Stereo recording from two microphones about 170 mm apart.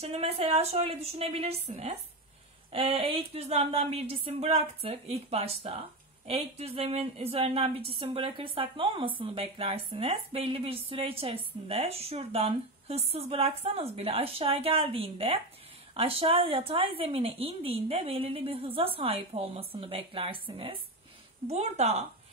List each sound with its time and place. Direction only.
0.0 s speech: 35° right (ahead or behind)